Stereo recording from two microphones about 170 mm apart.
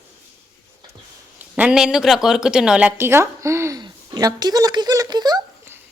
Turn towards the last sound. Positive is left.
turn(degrees=-25)  # may be behind; listen again after turning